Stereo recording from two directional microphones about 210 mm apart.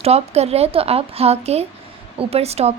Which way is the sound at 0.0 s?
30° right (ahead or behind).